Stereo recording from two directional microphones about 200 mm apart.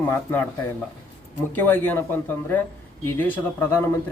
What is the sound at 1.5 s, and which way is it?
A man's voice, 10° left (ahead or behind).